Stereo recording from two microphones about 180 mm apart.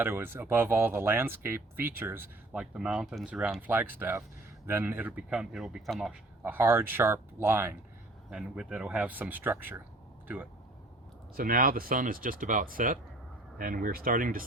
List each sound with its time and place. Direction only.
0.0 s speech: 10° right (ahead or behind)
11.3 s speech: 50° right (ahead or behind)